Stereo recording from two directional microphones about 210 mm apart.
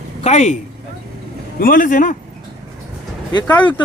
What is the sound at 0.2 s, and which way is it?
Speech, 30° left (ahead or behind).